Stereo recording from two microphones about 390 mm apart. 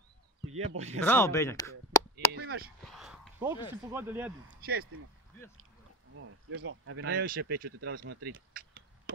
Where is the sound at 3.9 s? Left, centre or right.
Centre.